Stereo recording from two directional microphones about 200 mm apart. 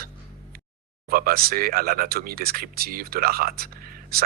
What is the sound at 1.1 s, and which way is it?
Speech, 45° right (ahead or behind).